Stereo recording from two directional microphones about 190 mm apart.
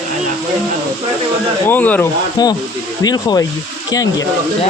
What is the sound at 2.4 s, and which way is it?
Speech, 20° left (ahead or behind).